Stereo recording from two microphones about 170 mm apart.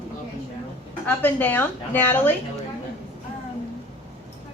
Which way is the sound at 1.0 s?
10° left (ahead or behind).